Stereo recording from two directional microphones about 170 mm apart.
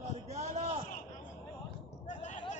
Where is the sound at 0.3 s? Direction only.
40° right (ahead or behind).